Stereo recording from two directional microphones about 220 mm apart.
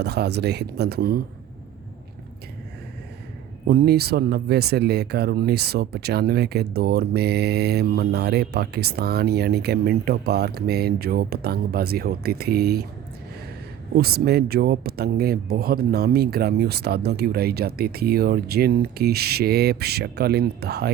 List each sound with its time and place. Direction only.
0.0 s speech: 50° right (ahead or behind)
3.7 s speech: 45° right (ahead or behind)
13.9 s speech: 45° right (ahead or behind)